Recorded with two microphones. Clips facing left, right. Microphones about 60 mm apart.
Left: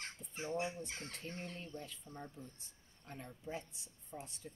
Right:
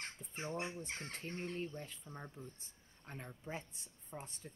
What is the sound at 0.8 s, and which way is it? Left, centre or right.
Speech, right.